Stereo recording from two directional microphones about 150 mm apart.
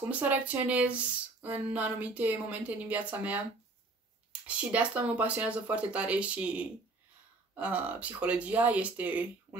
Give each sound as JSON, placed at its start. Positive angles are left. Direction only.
{"t": 0.1, "sound": "speech", "side_deg": -10}